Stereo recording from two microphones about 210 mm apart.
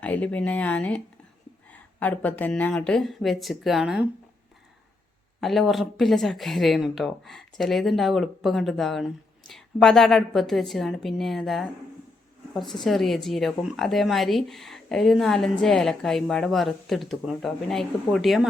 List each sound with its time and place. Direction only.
0.0 s speech: 5° left (ahead or behind)
5.4 s speech: centre (ahead or behind)